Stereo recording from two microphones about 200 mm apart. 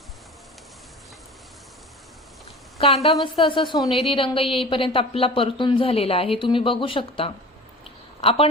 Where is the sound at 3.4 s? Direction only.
25° left (ahead or behind).